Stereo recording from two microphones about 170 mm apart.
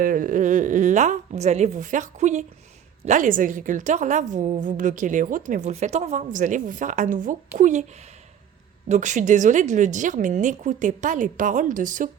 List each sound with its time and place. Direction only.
0.0 s a woman's voice: 55° right (ahead or behind)
8.9 s a woman's voice: 45° right (ahead or behind)